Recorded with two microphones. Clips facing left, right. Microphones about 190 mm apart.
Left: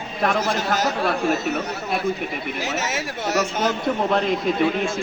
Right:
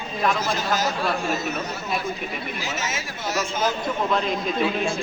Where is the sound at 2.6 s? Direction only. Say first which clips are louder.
Left 4 dB; 70° left (ahead or behind).